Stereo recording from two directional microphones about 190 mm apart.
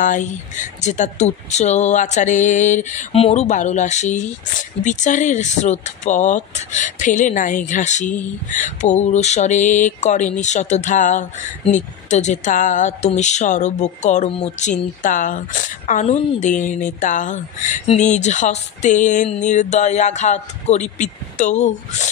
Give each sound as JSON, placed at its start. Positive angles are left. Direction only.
{"t": 0.0, "sound": "speech", "side_deg": 40}